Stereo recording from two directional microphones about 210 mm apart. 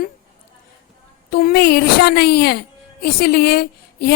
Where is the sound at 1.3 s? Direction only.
45° left (ahead or behind).